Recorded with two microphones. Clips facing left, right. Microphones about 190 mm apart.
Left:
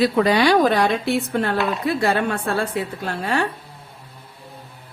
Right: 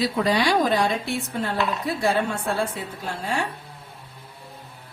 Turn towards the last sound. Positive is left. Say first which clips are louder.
# left 4 dB
turn(degrees=65)  # may be behind; listen again after turning